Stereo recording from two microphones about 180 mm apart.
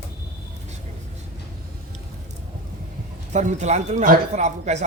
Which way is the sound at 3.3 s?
40° right (ahead or behind).